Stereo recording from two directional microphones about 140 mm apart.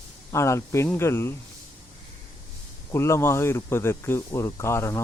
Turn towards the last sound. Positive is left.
turn(degrees=20)  # may be behind; listen again after turning